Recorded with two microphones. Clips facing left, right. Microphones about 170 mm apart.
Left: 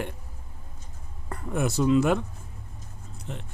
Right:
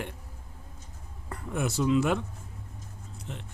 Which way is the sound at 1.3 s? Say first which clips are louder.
Left 3 dB; 45° left (ahead or behind).